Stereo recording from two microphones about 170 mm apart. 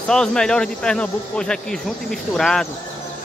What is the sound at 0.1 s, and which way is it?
Speech, 5° left (ahead or behind).